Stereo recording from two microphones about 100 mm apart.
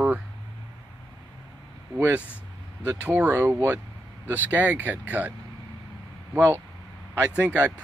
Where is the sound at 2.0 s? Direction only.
20° right (ahead or behind).